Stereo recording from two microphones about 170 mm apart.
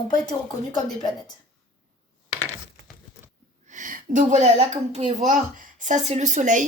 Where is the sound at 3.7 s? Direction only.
50° right (ahead or behind).